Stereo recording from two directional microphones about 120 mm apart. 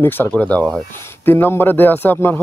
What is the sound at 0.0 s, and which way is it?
Speech, 15° left (ahead or behind).